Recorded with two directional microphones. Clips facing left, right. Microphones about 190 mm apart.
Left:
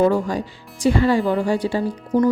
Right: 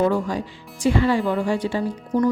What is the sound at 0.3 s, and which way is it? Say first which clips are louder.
A woman's voice: left 2 dB; 40° left (ahead or behind).